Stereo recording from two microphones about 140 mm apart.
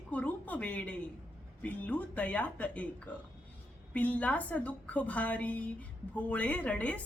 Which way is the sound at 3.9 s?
10° left (ahead or behind).